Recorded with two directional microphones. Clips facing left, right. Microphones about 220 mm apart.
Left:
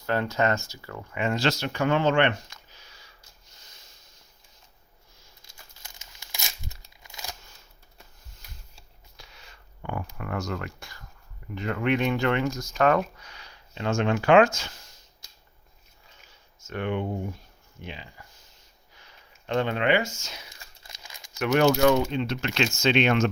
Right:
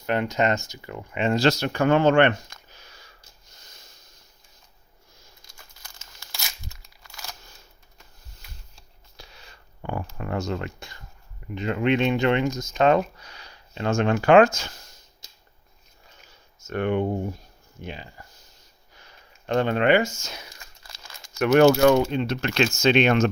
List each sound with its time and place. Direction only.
0.0 s speech: 20° right (ahead or behind)
1.4 s speech: 40° right (ahead or behind)
6.0 s tearing: 15° left (ahead or behind)
7.0 s a sound: 15° left (ahead or behind)
9.1 s a sound: 35° right (ahead or behind)
10.2 s speech: 25° right (ahead or behind)
13.2 s speech: 35° right (ahead or behind)
16.6 s speech: 45° right (ahead or behind)
20.8 s crumpling: 15° left (ahead or behind)
21.3 s speech: 50° right (ahead or behind)